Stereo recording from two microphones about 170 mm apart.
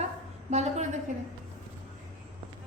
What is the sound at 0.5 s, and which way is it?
Speech, 40° right (ahead or behind).